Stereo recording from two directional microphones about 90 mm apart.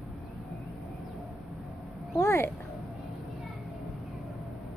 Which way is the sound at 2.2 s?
25° left (ahead or behind).